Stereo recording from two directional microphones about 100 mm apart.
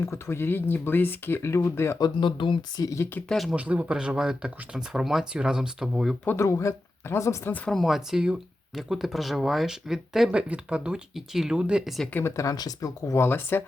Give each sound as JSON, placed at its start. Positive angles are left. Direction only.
{"t": 0.0, "sound": "speech", "side_deg": 25}
{"t": 2.0, "sound": "speech", "side_deg": 50}
{"t": 3.5, "sound": "speech", "side_deg": -15}
{"t": 6.2, "sound": "speech", "side_deg": 30}
{"t": 7.7, "sound": "speech", "side_deg": 0}
{"t": 12.1, "sound": "speech", "side_deg": 30}
{"t": 13.2, "sound": "speech", "side_deg": 20}